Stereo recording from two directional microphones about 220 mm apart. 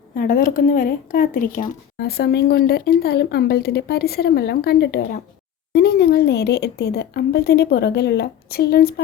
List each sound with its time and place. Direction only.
0.2 s speech: 35° left (ahead or behind)